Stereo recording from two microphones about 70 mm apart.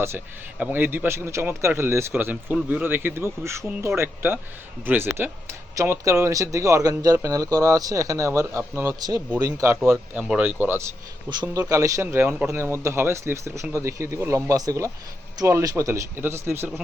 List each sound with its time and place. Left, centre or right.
0.6 s speech: right
2.3 s speech: right
2.8 s speech: right
9.0 s speech: right
9.4 s speech: right
9.8 s speech: right
11.3 s speech: right
11.7 s speech: right
12.0 s speech: right
15.4 s speech: right
16.1 s speech: right